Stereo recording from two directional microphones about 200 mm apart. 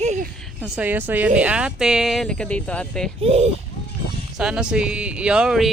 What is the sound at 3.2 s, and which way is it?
Speech, 30° right (ahead or behind).